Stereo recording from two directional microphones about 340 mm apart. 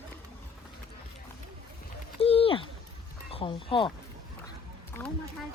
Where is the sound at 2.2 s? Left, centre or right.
Centre.